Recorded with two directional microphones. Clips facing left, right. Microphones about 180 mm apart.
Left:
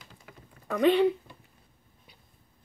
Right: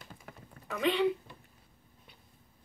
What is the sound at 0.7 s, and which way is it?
Speech, 50° left (ahead or behind).